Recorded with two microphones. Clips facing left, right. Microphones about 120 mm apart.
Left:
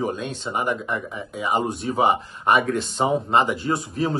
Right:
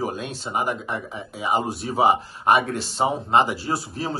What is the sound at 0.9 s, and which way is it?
A man's voice, 35° right (ahead or behind).